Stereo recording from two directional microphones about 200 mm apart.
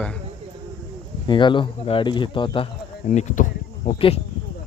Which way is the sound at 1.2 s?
25° left (ahead or behind).